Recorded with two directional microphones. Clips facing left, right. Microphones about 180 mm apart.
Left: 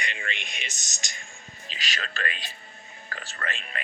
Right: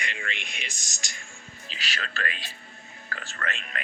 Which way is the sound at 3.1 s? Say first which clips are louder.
Right 1 dB; 35° left (ahead or behind).